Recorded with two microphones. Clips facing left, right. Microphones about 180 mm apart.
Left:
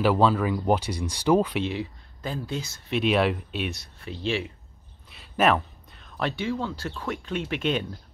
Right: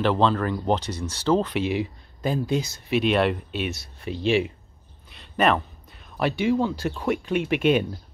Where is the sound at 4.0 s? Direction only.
15° right (ahead or behind).